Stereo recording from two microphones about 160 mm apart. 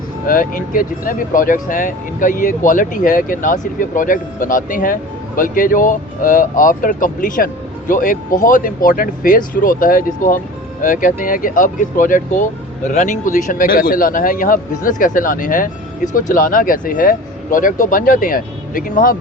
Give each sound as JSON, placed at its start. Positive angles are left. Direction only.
{"t": 0.3, "sound": "speech", "side_deg": 60}